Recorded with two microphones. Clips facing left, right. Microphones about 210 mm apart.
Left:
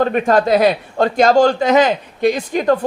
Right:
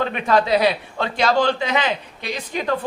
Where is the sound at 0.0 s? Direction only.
45° left (ahead or behind).